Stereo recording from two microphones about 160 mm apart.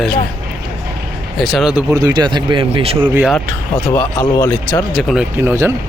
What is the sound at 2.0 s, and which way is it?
Speech, 25° right (ahead or behind).